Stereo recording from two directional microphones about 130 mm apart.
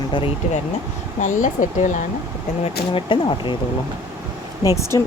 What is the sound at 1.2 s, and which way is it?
Speech, 85° left.